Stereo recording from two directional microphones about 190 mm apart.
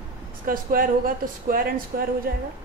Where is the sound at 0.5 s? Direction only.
45° right (ahead or behind).